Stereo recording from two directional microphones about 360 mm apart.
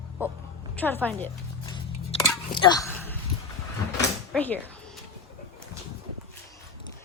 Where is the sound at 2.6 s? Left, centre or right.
Centre.